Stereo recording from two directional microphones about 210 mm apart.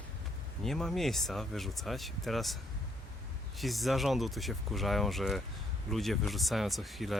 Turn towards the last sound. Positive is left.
turn(degrees=0)  # may be behind; listen again after turning